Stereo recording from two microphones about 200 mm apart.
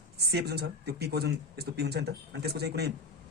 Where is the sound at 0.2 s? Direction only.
55° right (ahead or behind).